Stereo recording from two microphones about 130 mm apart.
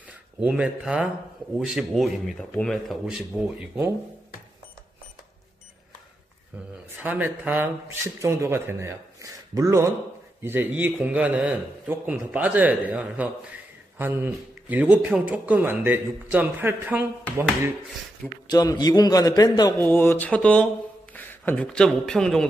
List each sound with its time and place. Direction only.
0.4 s speech: 10° right (ahead or behind)
7.0 s speech: 15° right (ahead or behind)
18.5 s a man's voice: 30° left (ahead or behind)
19.8 s speech: 15° left (ahead or behind)